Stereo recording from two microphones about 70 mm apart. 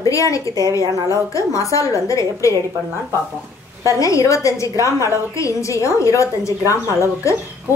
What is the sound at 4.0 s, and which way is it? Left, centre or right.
A woman's voice, left.